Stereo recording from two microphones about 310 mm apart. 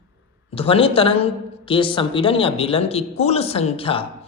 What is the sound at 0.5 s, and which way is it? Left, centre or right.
Speech, centre.